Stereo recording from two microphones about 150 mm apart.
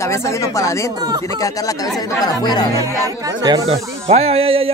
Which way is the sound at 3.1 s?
25° right (ahead or behind).